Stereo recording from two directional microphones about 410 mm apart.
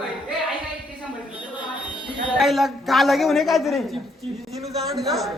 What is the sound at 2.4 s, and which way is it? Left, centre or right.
A man's voice, centre.